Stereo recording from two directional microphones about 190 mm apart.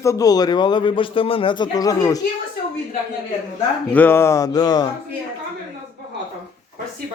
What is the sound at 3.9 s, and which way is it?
Speech, 10° left (ahead or behind).